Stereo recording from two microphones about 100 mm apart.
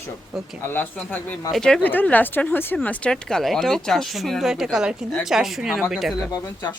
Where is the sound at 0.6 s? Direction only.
20° left (ahead or behind).